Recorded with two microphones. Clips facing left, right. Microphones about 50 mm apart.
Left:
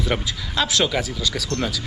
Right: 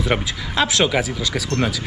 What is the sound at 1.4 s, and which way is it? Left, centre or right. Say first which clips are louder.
Speech: right 6 dB; right.